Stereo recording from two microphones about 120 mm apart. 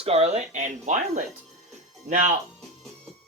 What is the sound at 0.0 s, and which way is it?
Speech, 60° right (ahead or behind).